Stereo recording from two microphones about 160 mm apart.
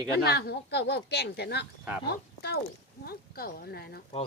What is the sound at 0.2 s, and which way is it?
Speech, 90° left.